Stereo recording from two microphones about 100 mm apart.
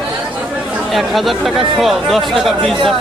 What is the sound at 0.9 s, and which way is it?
Speech, centre (ahead or behind).